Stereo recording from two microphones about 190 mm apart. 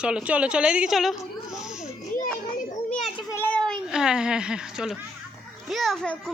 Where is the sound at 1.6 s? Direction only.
5° right (ahead or behind).